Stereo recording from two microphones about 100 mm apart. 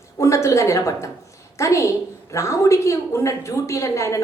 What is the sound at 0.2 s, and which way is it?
A woman's voice, 30° left (ahead or behind).